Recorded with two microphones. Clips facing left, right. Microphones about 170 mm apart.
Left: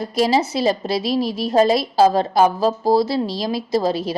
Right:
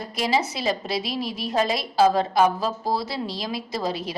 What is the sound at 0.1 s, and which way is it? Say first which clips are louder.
A woman's voice: left 6 dB; 35° left (ahead or behind).